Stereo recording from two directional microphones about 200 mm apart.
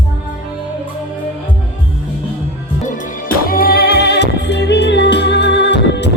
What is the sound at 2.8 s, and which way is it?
Music, 45° left (ahead or behind).